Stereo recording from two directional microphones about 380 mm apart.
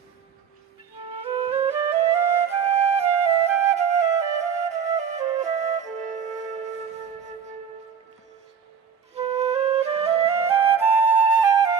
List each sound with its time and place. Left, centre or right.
1.2 s flute: centre
3.8 s flute: centre
9.1 s flute: centre